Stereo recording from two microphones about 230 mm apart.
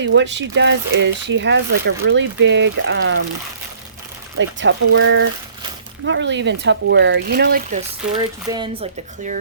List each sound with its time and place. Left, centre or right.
0.0 s speech: right
4.4 s speech: right
8.1 s speech: centre